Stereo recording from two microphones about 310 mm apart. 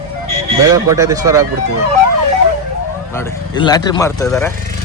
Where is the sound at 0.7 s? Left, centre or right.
Centre.